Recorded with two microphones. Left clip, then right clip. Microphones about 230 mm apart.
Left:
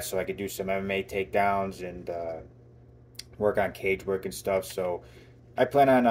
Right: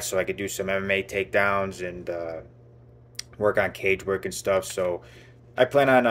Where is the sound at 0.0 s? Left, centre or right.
Right.